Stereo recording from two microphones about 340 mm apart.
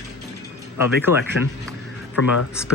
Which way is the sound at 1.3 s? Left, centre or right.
Left.